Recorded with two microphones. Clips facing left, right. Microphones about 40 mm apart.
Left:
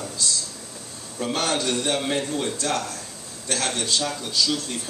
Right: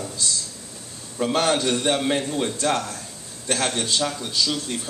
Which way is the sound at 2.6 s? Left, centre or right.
Right.